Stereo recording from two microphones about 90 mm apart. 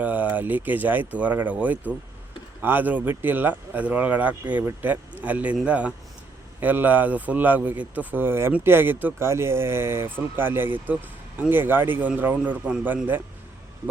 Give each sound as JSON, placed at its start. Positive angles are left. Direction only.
{"t": 0.0, "sound": "speech", "side_deg": -20}